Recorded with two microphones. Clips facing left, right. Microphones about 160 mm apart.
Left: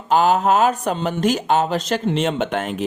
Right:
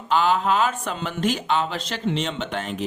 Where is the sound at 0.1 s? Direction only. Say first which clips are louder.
Left 4 dB; 45° left (ahead or behind).